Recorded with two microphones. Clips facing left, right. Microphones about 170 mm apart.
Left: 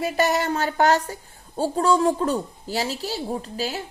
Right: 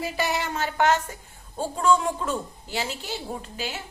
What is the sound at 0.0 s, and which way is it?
A woman's voice, 45° left (ahead or behind).